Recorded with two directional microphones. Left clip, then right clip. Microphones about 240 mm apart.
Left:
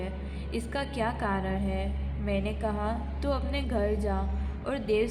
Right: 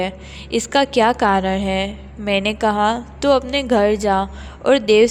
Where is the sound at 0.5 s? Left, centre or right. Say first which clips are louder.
Right 17 dB; right.